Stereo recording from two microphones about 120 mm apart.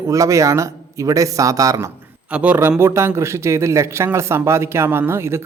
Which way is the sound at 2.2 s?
10° right (ahead or behind).